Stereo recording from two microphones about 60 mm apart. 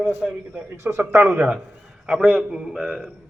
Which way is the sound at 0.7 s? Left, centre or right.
Right.